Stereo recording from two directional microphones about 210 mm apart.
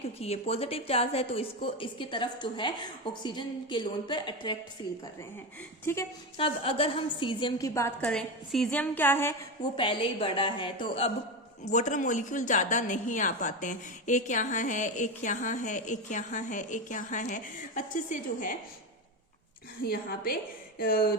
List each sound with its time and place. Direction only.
0.2 s a woman's voice: 30° left (ahead or behind)
5.8 s a woman's voice: 10° left (ahead or behind)
6.3 s a woman's voice: 25° left (ahead or behind); by 9.3 s 10° left (ahead or behind)
9.7 s a woman's voice: 25° left (ahead or behind)
19.8 s a woman's voice: 45° left (ahead or behind)